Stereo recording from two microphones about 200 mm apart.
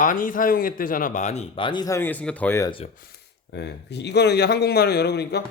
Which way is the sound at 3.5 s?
55° left (ahead or behind).